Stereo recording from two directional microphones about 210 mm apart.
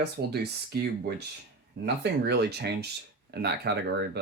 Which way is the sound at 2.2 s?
50° right (ahead or behind).